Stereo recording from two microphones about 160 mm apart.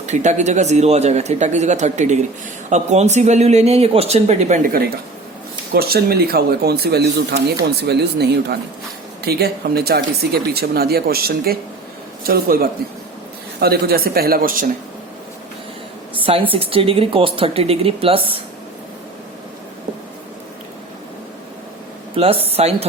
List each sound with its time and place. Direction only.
0.0 s speech: 45° right (ahead or behind)
5.7 s speech: 75° right (ahead or behind)
16.1 s a sound: 35° right (ahead or behind)
16.5 s speech: 35° right (ahead or behind)
22.1 s speech: 35° right (ahead or behind)